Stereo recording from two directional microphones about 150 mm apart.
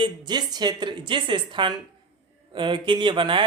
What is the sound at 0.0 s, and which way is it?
Speech, 30° right (ahead or behind).